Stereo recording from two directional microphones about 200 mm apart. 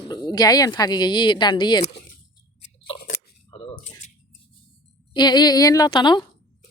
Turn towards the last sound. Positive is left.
turn(degrees=20)  # may be behind; listen again after turning